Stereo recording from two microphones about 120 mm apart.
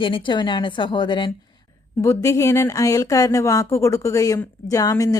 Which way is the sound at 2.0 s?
25° left (ahead or behind).